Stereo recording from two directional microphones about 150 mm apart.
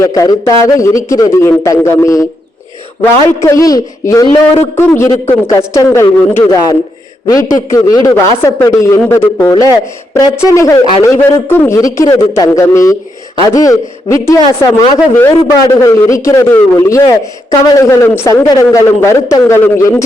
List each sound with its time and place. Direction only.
0.0 s a man's voice: 25° left (ahead or behind)